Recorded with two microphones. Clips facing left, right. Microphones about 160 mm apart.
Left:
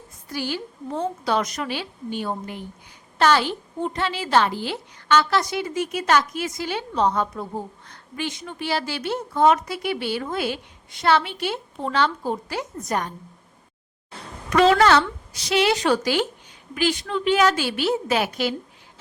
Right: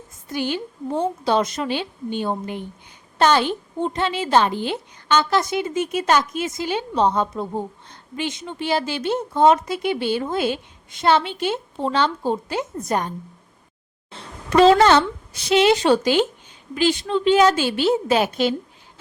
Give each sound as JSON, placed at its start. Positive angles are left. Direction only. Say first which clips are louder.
{"t": 0.3, "sound": "a woman's voice", "louder": "right 4 dB", "side_deg": -20}
{"t": 14.1, "sound": "a sound", "louder": "right 3 dB", "side_deg": -30}
{"t": 15.4, "sound": "a woman's voice", "louder": "right 4 dB", "side_deg": -25}